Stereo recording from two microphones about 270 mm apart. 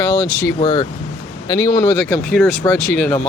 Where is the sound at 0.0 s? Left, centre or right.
Centre.